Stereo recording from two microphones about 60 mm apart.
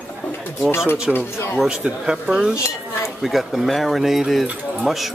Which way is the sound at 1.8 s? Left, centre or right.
Centre.